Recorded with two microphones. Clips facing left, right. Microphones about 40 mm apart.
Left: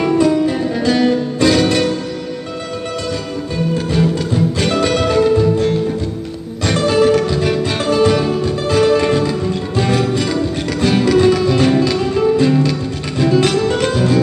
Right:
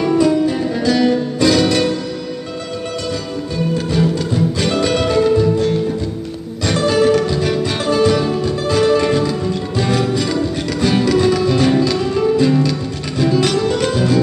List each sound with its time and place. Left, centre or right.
0.1 s music: centre
3.7 s music: centre
6.9 s music: centre
10.8 s music: centre